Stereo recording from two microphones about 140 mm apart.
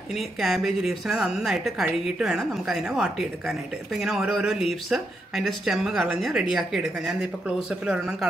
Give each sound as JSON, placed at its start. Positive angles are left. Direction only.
{"t": 0.1, "sound": "speech", "side_deg": 0}